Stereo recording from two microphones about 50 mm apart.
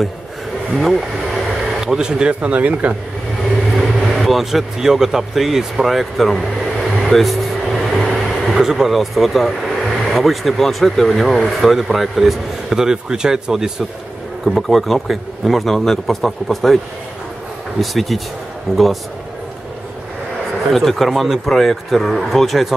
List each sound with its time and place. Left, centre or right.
0.7 s speech: centre; by 3.0 s right
3.7 s speech: centre
8.1 s vehicle: centre
8.5 s a man's voice: centre
17.7 s speech: centre
20.7 s speech: centre